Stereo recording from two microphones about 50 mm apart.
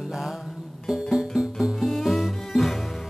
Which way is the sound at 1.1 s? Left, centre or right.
Centre.